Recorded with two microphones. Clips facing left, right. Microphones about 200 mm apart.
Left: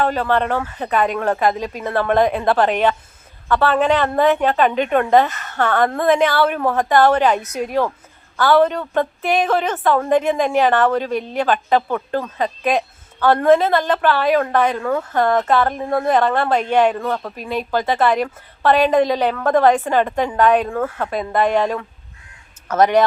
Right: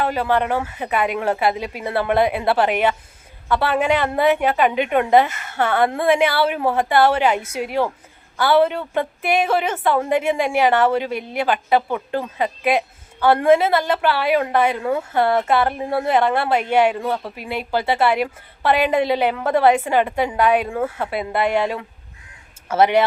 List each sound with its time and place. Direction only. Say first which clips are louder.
0.0 s speech: left 1 dB; 10° right (ahead or behind)
20.7 s speech: left 1 dB; 25° right (ahead or behind)
21.1 s speech: left 4 dB; 15° right (ahead or behind)